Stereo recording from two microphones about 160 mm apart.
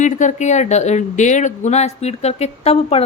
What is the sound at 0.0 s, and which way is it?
Speech, 50° left (ahead or behind).